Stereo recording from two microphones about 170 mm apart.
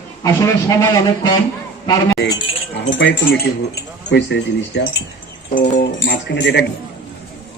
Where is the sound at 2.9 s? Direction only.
90° left.